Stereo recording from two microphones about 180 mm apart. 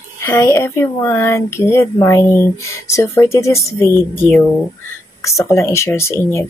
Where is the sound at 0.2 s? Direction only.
15° left (ahead or behind).